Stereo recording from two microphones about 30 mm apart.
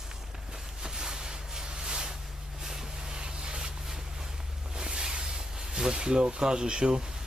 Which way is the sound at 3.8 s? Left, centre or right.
Centre.